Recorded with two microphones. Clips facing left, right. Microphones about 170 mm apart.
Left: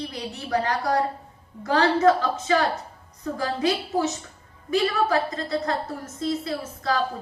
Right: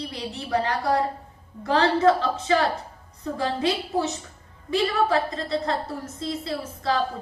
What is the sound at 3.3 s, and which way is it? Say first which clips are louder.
Speech: even; 25° right (ahead or behind).